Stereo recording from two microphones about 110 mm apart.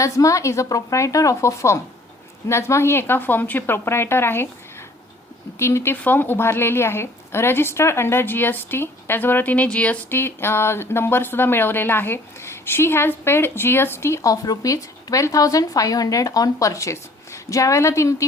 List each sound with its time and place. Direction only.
0.0 s a woman's voice: 30° left (ahead or behind)
5.5 s a woman's voice: 25° left (ahead or behind)